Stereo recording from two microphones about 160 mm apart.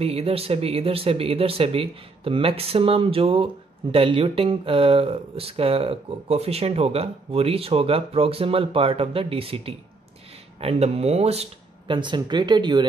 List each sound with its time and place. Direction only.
0.0 s speech: 40° right (ahead or behind)
11.9 s speech: 30° right (ahead or behind)